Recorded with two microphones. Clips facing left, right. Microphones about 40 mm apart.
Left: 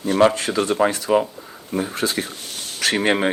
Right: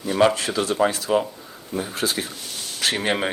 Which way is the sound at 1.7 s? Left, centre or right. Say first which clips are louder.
Left 3 dB; left.